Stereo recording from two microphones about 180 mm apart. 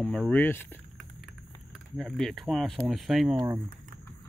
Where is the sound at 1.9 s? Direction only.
Centre (ahead or behind).